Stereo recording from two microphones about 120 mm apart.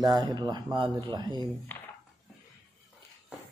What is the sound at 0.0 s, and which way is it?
Speech, 35° right (ahead or behind).